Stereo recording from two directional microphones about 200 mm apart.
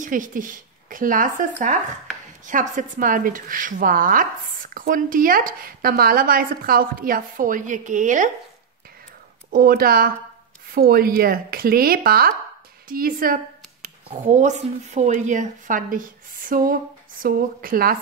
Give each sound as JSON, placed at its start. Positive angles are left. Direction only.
{"t": 0.0, "sound": "a woman's voice", "side_deg": -40}
{"t": 9.5, "sound": "a woman's voice", "side_deg": -45}